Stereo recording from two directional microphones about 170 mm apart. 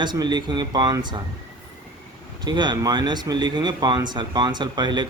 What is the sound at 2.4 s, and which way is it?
Speech, 25° right (ahead or behind).